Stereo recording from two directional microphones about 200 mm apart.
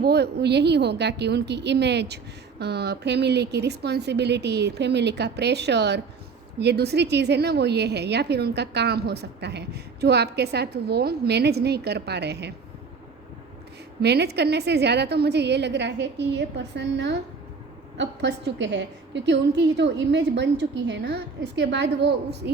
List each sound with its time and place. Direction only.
0.0 s a woman's voice: 55° right (ahead or behind)
14.0 s a woman's voice: 55° right (ahead or behind)